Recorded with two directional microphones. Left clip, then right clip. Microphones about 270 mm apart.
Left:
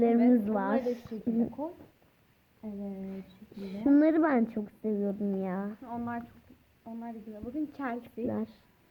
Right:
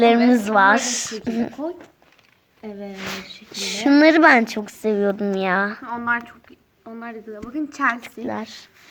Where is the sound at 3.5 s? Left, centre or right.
Centre.